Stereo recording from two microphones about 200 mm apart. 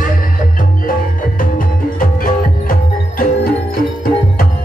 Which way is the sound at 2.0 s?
45° left (ahead or behind).